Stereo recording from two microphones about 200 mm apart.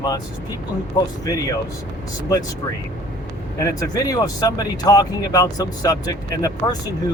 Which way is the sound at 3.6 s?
20° left (ahead or behind).